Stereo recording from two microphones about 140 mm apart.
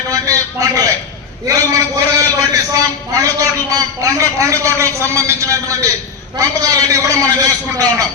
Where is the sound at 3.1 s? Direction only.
25° right (ahead or behind).